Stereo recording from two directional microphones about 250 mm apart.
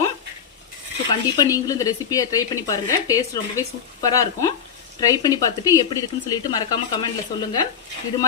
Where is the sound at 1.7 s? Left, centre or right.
Centre.